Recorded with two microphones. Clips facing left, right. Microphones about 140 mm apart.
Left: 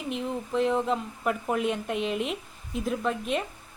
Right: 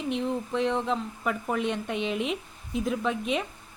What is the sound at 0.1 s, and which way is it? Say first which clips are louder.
A woman's voice: right 1 dB; centre (ahead or behind).